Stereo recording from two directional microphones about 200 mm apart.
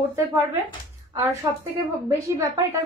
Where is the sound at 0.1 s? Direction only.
15° right (ahead or behind).